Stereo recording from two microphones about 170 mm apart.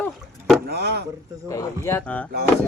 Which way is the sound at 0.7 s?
70° right (ahead or behind).